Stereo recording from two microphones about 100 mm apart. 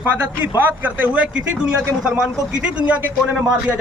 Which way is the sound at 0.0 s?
20° right (ahead or behind).